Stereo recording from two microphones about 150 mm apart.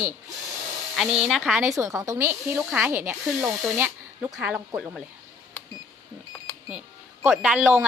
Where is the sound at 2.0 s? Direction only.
20° right (ahead or behind).